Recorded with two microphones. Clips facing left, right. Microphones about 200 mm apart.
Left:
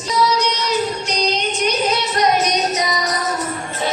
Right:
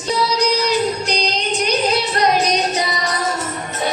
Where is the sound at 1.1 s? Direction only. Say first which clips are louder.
Even; 35° right (ahead or behind).